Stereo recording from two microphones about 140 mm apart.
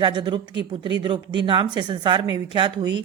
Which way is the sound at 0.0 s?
35° right (ahead or behind).